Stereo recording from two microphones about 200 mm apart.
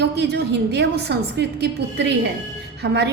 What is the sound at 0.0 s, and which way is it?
A woman's voice, 55° right (ahead or behind).